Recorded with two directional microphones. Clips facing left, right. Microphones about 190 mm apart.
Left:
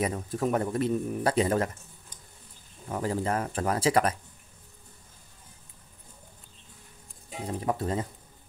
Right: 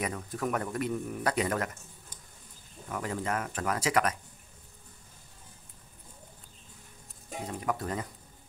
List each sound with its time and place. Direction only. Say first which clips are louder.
0.0 s speech: left 5 dB; 30° left (ahead or behind)
2.9 s speech: left 4 dB; 30° left (ahead or behind)
7.4 s speech: left 4 dB; 30° left (ahead or behind)